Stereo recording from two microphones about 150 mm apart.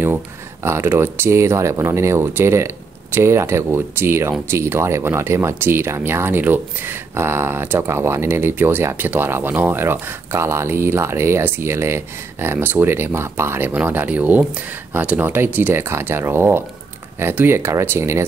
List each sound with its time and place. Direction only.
0.7 s speech: 15° right (ahead or behind)